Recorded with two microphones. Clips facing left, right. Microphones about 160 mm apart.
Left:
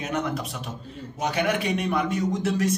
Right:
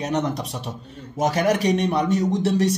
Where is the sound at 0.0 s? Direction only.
35° right (ahead or behind).